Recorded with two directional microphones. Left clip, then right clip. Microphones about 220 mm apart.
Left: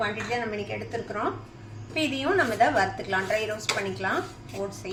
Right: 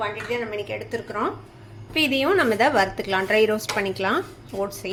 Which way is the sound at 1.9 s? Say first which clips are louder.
Right 6 dB; 45° right (ahead or behind).